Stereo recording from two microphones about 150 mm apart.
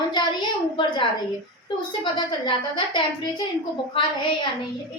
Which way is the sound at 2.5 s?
30° left (ahead or behind).